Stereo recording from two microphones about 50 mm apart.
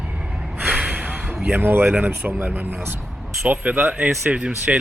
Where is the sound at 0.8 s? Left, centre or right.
Right.